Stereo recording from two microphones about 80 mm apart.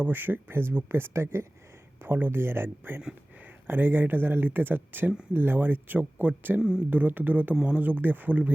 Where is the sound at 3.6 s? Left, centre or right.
Right.